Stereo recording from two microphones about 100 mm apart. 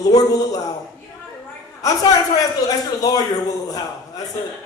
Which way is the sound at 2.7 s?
40° left (ahead or behind).